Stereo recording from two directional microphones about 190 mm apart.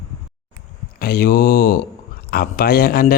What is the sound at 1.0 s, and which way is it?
Speech, 50° left (ahead or behind).